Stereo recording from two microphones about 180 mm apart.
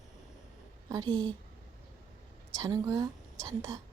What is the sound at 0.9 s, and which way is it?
Speech, 20° right (ahead or behind).